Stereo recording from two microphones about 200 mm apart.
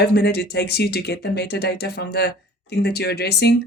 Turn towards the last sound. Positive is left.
turn(degrees=55)  # may be behind; listen again after turning